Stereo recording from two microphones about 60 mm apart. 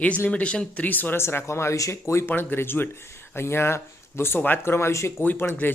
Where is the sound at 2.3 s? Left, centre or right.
Left.